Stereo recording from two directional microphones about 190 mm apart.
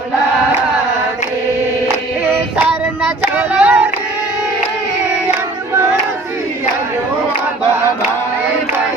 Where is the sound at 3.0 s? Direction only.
5° right (ahead or behind).